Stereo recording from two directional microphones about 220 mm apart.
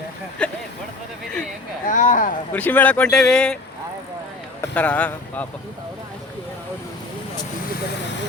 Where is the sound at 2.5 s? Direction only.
10° left (ahead or behind).